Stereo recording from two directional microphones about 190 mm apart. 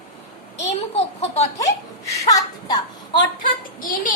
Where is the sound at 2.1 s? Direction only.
20° left (ahead or behind).